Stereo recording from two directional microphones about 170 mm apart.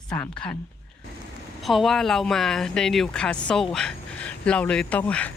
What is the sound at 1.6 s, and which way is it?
Speech, centre (ahead or behind).